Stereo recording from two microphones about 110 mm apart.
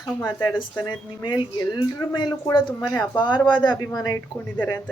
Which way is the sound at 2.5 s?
45° left (ahead or behind).